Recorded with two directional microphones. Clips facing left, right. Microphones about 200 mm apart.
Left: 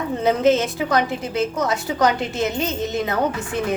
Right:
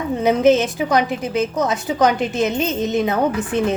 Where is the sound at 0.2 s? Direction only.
15° right (ahead or behind).